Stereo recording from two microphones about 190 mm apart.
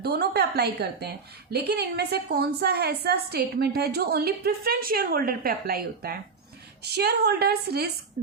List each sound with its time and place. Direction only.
0.0 s a woman's voice: 55° right (ahead or behind)